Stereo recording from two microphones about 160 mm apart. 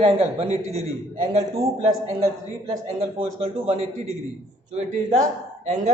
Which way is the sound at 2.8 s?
40° right (ahead or behind).